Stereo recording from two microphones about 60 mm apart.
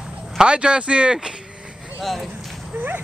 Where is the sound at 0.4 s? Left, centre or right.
Centre.